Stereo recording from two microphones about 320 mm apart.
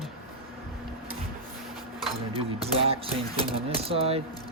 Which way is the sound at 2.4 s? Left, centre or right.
Centre.